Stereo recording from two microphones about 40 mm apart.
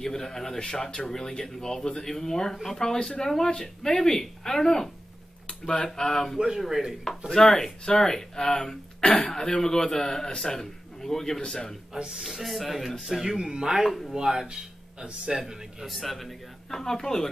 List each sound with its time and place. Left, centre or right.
0.0 s speech: centre
5.5 s a sound: centre
5.9 s speech: centre
6.3 s speech: centre
7.2 s speech: centre
12.2 s speech: centre
13.4 s speech: centre
13.8 s speech: centre
14.1 s a man's voice: centre
15.4 s speech: centre
16.8 s speech: centre